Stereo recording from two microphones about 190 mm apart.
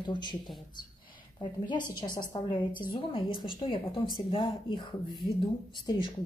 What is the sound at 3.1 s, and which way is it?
Speech, 25° left (ahead or behind).